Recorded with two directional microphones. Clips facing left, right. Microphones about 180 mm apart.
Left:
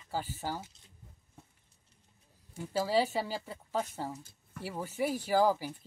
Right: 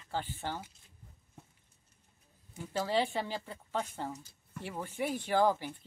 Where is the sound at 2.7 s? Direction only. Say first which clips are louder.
Left 2 dB; 5° left (ahead or behind).